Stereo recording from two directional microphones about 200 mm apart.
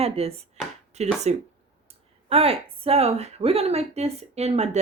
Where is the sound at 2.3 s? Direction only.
30° right (ahead or behind).